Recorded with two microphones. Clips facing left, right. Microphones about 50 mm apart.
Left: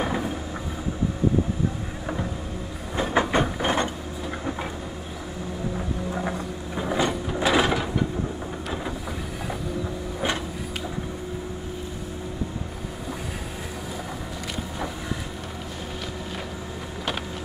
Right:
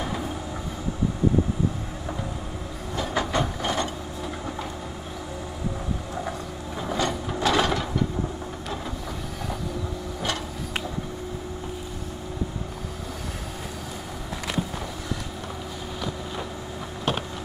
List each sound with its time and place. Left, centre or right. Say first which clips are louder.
3.0 s train: left 4 dB; left
6.8 s a sound: left 2 dB; centre
7.3 s mechanisms: left 1 dB; centre